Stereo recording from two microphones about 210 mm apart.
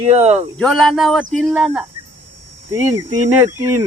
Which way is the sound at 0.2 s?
30° right (ahead or behind).